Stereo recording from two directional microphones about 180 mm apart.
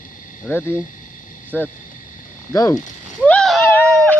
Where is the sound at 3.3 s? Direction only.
Centre (ahead or behind).